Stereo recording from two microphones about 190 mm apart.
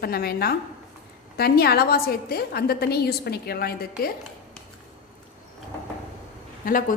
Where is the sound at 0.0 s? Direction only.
55° left (ahead or behind).